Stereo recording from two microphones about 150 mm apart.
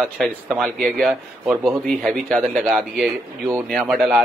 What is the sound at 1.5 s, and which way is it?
Speech, 15° right (ahead or behind).